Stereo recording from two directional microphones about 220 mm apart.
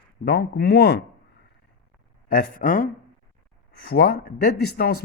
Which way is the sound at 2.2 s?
40° left (ahead or behind).